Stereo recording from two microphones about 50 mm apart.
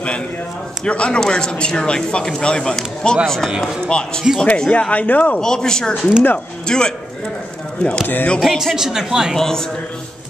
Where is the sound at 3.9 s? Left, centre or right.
Centre.